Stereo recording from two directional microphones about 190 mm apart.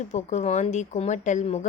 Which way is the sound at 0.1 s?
35° left (ahead or behind).